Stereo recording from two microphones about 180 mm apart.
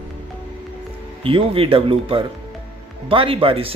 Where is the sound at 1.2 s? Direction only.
30° right (ahead or behind).